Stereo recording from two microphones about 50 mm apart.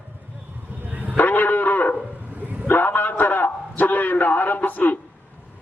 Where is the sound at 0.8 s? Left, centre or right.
Right.